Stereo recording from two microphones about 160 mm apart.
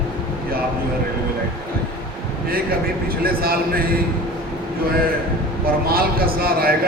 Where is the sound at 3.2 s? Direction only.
70° right (ahead or behind).